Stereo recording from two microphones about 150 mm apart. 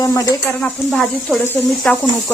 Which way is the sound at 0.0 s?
20° left (ahead or behind).